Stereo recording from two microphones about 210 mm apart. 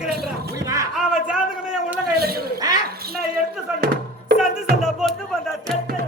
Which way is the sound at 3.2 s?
45° right (ahead or behind).